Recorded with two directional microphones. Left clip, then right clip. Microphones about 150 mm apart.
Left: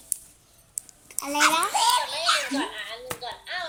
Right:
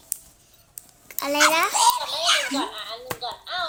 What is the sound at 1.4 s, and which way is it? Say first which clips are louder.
Babbling: right 3 dB; 75° right (ahead or behind).